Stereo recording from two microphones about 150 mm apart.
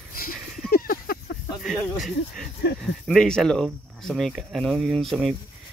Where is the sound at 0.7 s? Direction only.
80° left.